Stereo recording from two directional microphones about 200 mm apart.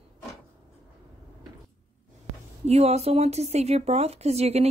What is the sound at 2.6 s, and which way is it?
Speech, 30° right (ahead or behind).